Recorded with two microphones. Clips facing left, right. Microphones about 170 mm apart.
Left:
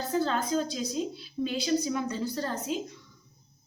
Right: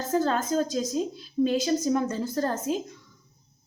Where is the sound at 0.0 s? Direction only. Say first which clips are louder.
Right 3 dB; 45° right (ahead or behind).